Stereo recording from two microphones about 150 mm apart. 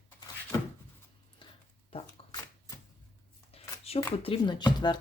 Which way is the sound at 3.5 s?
40° left (ahead or behind).